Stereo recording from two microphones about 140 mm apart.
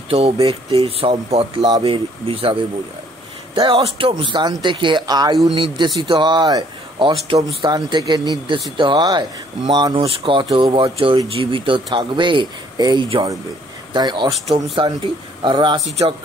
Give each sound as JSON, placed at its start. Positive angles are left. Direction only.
{"t": 0.1, "sound": "speech", "side_deg": -45}
{"t": 1.6, "sound": "speech", "side_deg": -30}
{"t": 1.9, "sound": "speech", "side_deg": -40}
{"t": 9.9, "sound": "speech", "side_deg": -40}